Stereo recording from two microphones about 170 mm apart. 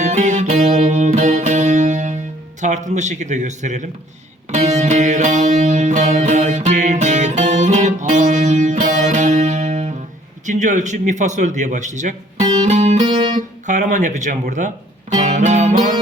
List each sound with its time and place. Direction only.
0.0 s music: 45° right (ahead or behind)
2.6 s a man's voice: 45° right (ahead or behind)
4.5 s music: 40° right (ahead or behind)
10.4 s a man's voice: 45° right (ahead or behind)
15.1 s music: 45° right (ahead or behind)